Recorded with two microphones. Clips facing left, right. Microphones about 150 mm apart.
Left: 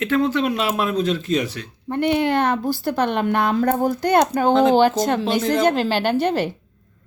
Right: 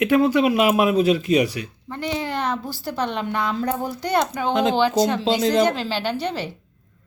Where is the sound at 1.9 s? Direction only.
60° left (ahead or behind).